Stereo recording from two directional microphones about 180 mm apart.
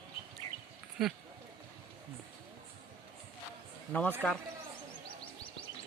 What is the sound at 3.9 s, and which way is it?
Speech, 10° left (ahead or behind).